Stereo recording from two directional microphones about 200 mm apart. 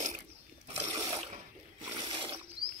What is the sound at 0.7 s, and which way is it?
Water, 20° right (ahead or behind).